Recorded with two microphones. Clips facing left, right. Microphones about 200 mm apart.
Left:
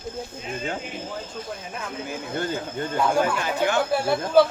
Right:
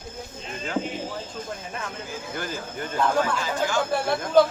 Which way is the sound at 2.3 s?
25° left (ahead or behind).